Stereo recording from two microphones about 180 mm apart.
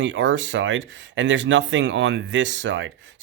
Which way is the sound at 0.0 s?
90° right.